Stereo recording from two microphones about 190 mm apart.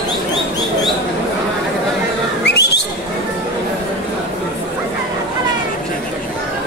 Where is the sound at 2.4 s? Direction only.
60° left (ahead or behind).